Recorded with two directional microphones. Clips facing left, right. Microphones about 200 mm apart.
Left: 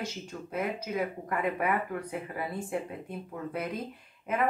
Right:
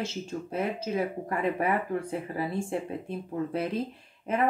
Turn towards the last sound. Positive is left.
turn(degrees=-30)  # may be behind; listen again after turning